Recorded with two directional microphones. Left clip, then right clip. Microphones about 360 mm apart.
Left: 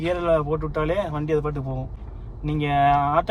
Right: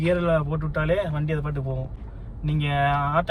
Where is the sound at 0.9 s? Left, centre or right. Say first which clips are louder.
Left 3 dB; left.